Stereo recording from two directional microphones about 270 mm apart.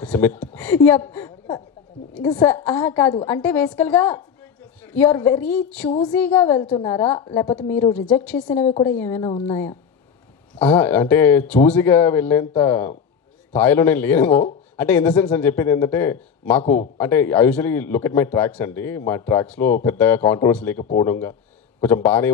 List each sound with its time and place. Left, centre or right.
0.0 s a woman's voice: centre
3.4 s a man's voice: centre
5.9 s a man's voice: centre
8.5 s a man's voice: centre
16.6 s a man's voice: left
17.0 s a man's voice: centre